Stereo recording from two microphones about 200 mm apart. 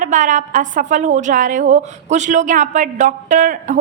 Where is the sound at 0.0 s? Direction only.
40° right (ahead or behind).